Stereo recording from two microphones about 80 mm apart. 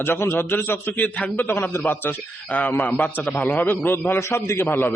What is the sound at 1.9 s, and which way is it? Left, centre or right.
A man's voice, left.